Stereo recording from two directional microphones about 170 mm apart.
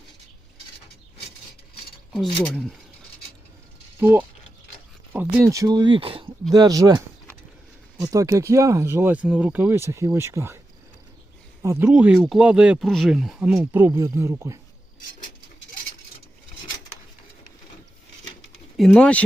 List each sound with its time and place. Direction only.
2.4 s speech: centre (ahead or behind)
5.1 s speech: 15° right (ahead or behind); by 6.2 s 30° right (ahead or behind)
6.5 s speech: 20° right (ahead or behind)
11.6 s speech: 15° right (ahead or behind)
11.9 s speech: 5° right (ahead or behind)
18.9 s speech: 5° left (ahead or behind)